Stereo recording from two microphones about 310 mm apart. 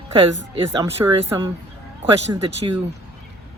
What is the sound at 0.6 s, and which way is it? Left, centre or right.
Speech, centre.